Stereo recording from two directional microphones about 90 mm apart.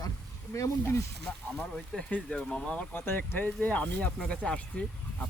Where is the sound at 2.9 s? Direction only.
25° left (ahead or behind).